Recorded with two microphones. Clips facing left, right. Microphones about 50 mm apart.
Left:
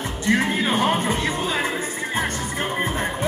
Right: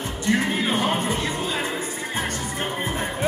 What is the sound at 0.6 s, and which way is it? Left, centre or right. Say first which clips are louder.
Music: left 2 dB; left.